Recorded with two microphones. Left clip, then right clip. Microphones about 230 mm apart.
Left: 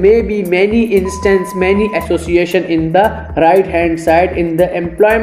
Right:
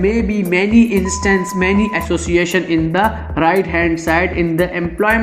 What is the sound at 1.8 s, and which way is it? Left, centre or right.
Speech, right.